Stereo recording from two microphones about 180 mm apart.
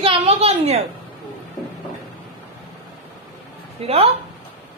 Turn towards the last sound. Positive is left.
turn(degrees=-35)  # may be behind; listen again after turning